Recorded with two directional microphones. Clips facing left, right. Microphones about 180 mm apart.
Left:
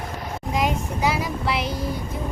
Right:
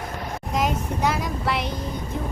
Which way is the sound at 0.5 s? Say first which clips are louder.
Even; centre (ahead or behind).